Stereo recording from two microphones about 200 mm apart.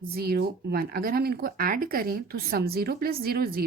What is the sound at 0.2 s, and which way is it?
Speech, 50° right (ahead or behind).